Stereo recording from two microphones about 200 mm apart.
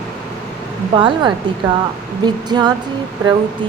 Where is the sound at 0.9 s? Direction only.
25° right (ahead or behind).